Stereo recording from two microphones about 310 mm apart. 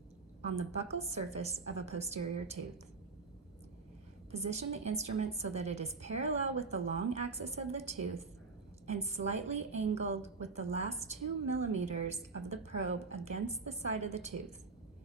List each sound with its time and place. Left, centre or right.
0.4 s a woman's voice: right
4.3 s a woman's voice: right